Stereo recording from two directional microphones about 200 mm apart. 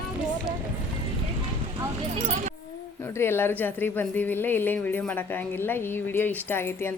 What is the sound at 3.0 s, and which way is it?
Speech, 10° left (ahead or behind).